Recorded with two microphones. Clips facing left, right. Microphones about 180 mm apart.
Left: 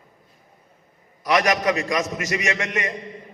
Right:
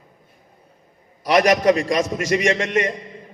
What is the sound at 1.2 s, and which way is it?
A man's voice, 30° right (ahead or behind).